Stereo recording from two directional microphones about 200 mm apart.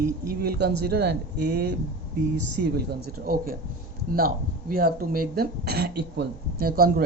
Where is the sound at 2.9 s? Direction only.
45° right (ahead or behind).